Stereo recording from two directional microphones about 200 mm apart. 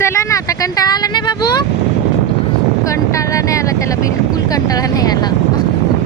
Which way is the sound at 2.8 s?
15° left (ahead or behind).